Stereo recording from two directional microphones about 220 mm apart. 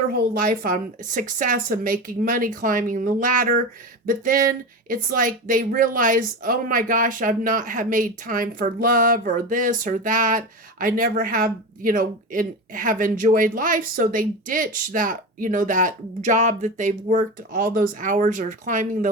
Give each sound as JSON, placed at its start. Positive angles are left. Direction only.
{"t": 0.1, "sound": "speech", "side_deg": -45}